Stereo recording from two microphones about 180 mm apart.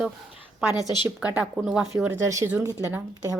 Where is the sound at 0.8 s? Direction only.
25° left (ahead or behind).